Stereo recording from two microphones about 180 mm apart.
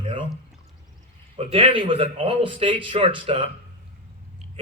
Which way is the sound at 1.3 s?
30° right (ahead or behind).